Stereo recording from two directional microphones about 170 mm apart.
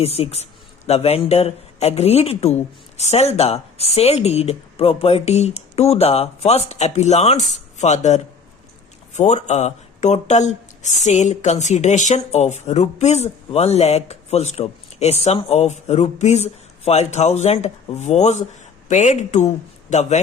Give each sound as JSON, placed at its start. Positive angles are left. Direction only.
{"t": 0.0, "sound": "speech", "side_deg": 35}